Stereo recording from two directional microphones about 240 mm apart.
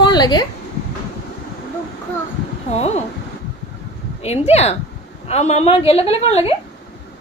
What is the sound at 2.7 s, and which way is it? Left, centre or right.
Speech, left.